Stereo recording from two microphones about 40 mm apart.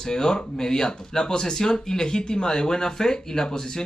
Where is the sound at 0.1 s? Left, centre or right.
Centre.